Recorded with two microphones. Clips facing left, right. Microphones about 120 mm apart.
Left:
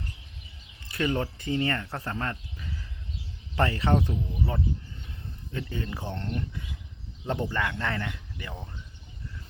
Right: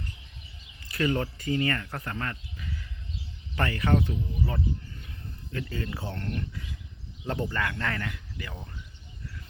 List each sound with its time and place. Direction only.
0.9 s speech: 20° left (ahead or behind)
3.5 s speech: 25° left (ahead or behind)